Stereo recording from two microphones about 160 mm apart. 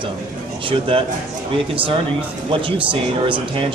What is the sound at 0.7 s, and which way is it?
Speech, 35° right (ahead or behind).